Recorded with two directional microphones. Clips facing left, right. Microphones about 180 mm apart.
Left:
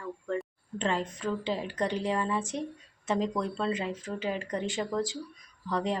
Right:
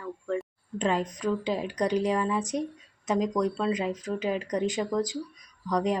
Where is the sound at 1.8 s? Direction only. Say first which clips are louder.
Right 5 dB; 25° left (ahead or behind).